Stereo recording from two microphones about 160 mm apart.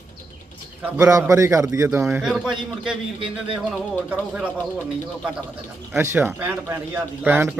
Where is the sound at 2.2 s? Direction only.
5° right (ahead or behind).